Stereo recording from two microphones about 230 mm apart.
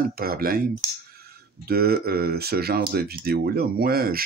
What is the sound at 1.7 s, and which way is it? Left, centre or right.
Speech, right.